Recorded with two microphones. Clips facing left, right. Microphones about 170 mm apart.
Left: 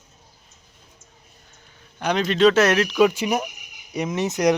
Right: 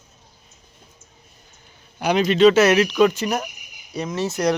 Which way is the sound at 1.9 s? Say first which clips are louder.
Right 3 dB; 10° right (ahead or behind).